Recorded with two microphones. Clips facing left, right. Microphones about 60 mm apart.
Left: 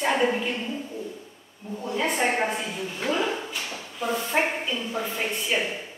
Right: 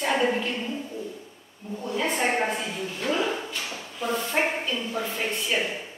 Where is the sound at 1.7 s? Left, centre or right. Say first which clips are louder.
Left 1 dB; centre.